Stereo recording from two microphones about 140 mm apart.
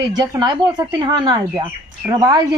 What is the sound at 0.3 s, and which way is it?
Speech, 30° right (ahead or behind).